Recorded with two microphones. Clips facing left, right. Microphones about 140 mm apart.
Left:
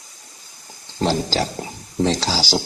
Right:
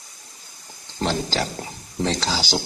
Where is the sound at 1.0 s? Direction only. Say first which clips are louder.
Left 3 dB; 35° left (ahead or behind).